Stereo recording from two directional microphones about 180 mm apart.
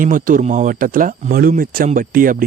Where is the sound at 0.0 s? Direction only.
50° right (ahead or behind).